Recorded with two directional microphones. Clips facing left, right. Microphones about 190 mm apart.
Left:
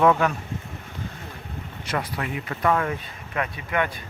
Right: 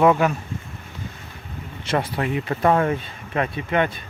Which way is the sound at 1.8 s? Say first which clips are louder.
Right 6 dB; 30° right (ahead or behind).